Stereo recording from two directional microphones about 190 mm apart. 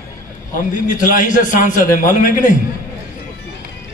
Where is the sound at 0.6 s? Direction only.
45° left (ahead or behind).